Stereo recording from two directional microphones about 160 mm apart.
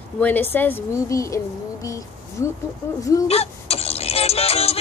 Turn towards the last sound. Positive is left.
turn(degrees=40)  # may be behind; listen again after turning